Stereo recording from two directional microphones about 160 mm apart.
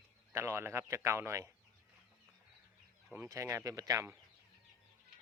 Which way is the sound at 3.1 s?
15° right (ahead or behind).